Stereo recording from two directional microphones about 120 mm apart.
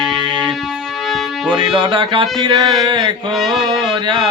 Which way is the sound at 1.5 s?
45° right (ahead or behind).